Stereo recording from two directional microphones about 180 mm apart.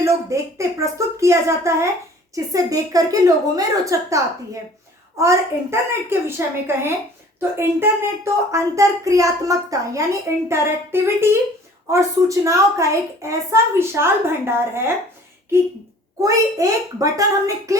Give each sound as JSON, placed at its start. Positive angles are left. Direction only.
{"t": 0.0, "sound": "a woman's voice", "side_deg": -15}
{"t": 16.2, "sound": "a woman's voice", "side_deg": -20}